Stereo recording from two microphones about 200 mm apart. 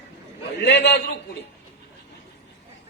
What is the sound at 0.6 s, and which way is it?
Speech, 60° left (ahead or behind).